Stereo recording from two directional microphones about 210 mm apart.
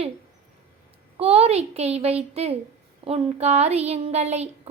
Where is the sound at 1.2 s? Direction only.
30° right (ahead or behind).